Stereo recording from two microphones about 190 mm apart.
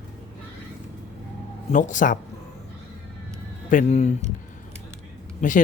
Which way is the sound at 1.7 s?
40° left (ahead or behind).